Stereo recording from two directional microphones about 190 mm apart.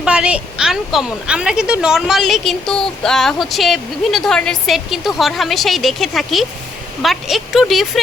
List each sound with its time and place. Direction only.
0.0 s a woman's voice: 5° right (ahead or behind)